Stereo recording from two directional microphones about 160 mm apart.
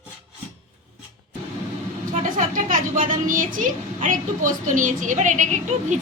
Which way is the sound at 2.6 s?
60° right (ahead or behind).